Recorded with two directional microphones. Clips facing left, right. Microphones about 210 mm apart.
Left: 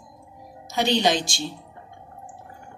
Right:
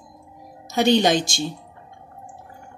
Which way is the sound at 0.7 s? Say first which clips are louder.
Right 4 dB; 50° right (ahead or behind).